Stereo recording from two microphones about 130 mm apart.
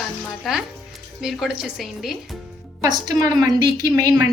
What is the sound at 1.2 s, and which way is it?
Speech, centre (ahead or behind).